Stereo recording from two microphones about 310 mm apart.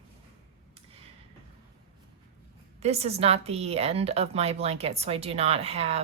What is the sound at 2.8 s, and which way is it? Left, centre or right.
A woman's voice, centre.